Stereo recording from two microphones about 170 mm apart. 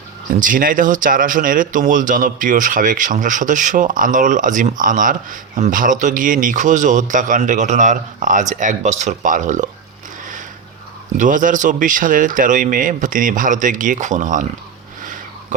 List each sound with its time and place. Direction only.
0.3 s speech: 50° right (ahead or behind)
11.2 s speech: 50° right (ahead or behind)
15.0 s a sound: 50° right (ahead or behind)